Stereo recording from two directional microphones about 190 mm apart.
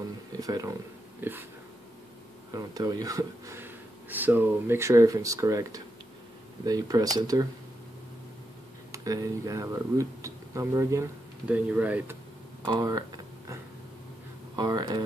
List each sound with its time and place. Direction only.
0.4 s speech: 20° right (ahead or behind)
2.5 s speech: 20° right (ahead or behind)
8.9 s speech: 20° right (ahead or behind)
12.6 s a sound: 25° right (ahead or behind)
14.5 s speech: 20° right (ahead or behind)